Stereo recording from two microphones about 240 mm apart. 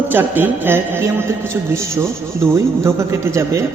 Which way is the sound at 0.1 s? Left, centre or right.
Centre.